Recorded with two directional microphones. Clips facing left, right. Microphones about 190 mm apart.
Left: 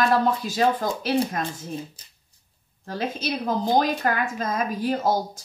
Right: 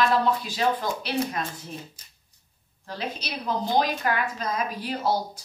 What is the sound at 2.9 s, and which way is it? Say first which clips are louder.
A woman's voice: left 6 dB; 45° left (ahead or behind).